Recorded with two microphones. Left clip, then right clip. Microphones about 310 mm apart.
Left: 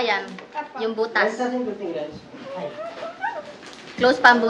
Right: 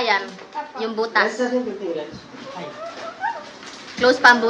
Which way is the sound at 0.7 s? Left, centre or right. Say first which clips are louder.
Right 2 dB; centre.